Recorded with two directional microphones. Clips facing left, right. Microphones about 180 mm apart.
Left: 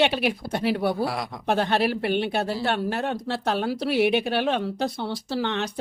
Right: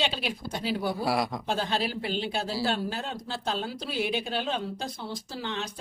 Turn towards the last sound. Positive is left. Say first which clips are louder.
# left 8 dB
turn(degrees=65)  # may be behind; listen again after turning